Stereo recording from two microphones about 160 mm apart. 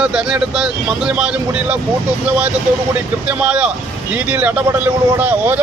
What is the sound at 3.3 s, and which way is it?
Speech, 10° right (ahead or behind).